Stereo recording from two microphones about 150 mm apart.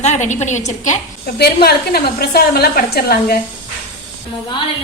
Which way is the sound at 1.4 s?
90° left.